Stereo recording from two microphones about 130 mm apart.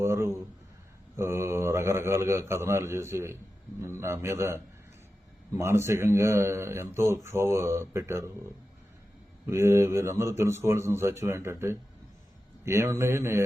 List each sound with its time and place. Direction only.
0.0 s speech: 20° right (ahead or behind)
9.5 s speech: 20° right (ahead or behind)